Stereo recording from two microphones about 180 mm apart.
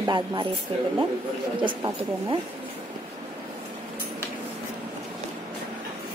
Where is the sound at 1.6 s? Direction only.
25° right (ahead or behind).